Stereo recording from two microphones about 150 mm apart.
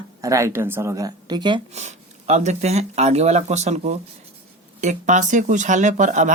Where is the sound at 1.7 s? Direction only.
50° right (ahead or behind).